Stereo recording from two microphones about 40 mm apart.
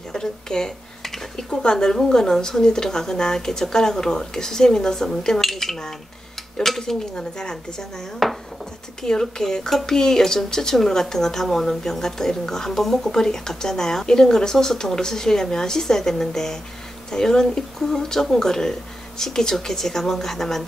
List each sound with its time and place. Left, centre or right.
0.1 s a sound: centre
2.0 s speech: centre
7.2 s speech: centre
8.2 s speech: centre
9.0 s speech: centre